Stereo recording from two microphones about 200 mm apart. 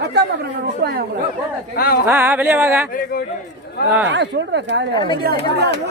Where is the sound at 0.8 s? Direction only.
50° right (ahead or behind).